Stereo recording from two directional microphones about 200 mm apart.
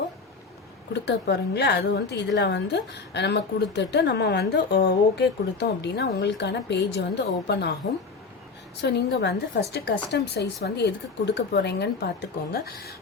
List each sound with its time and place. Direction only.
0.9 s a woman's voice: 60° left (ahead or behind)
8.8 s a woman's voice: 60° left (ahead or behind)